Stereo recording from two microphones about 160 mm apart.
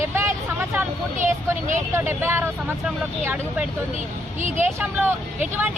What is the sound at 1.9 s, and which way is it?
Speech, 15° right (ahead or behind).